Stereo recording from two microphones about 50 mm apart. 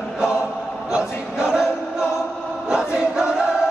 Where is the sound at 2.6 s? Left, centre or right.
Centre.